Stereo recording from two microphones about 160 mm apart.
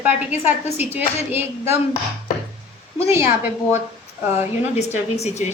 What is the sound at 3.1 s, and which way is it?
Speech, 15° right (ahead or behind).